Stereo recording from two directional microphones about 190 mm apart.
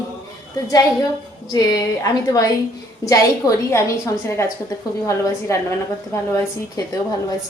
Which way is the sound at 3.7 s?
15° left (ahead or behind).